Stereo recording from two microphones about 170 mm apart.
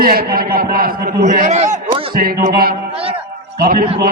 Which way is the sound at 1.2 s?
45° right (ahead or behind).